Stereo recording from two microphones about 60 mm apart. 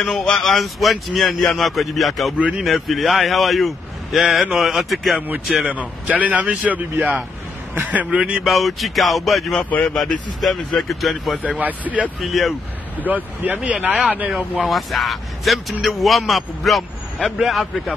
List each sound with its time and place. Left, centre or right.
0.0 s a man's voice: centre
5.7 s a man's voice: right
8.5 s a man's voice: centre
9.5 s speech: left
9.9 s a man's voice: centre
11.4 s a man's voice: right
12.2 s a man's voice: centre
13.0 s a man's voice: right
13.6 s speech: centre
14.3 s a man's voice: centre